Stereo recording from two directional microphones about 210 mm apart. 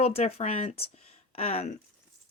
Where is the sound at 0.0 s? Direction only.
30° left (ahead or behind).